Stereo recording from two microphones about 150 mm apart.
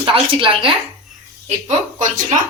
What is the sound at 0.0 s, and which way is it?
Speech, 35° right (ahead or behind).